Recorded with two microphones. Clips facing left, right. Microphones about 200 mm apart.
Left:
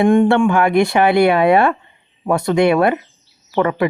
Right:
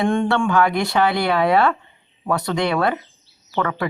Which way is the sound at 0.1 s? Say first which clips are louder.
Left 6 dB; 20° left (ahead or behind).